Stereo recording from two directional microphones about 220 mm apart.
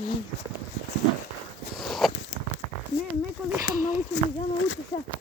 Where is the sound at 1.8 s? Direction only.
Centre (ahead or behind).